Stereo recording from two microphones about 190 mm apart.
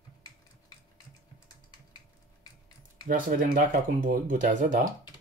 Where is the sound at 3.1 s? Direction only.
45° right (ahead or behind).